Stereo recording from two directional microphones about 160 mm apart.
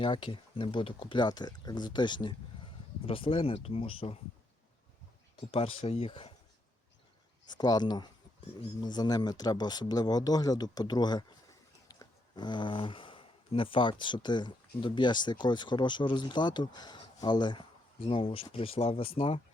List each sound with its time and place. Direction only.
0.0 s speech: 30° left (ahead or behind)
5.5 s speech: 35° left (ahead or behind)
7.5 s speech: 25° left (ahead or behind)